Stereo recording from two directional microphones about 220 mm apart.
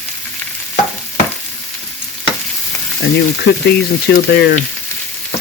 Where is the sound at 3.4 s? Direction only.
50° left (ahead or behind).